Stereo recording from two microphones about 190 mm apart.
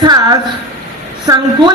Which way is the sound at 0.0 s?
20° right (ahead or behind).